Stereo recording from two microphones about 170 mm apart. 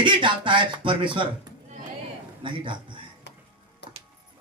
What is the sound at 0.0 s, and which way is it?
Speech, 30° right (ahead or behind).